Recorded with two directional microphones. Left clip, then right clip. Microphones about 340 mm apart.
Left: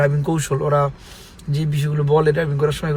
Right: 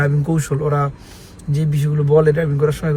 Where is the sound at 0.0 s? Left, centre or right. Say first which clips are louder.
Left 1 dB; left.